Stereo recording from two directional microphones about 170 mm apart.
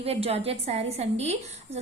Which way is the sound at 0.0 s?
35° right (ahead or behind).